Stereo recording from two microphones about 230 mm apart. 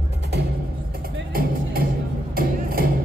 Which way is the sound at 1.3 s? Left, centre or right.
Right.